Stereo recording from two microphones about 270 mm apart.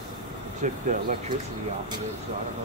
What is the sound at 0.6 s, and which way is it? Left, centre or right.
Speech, right.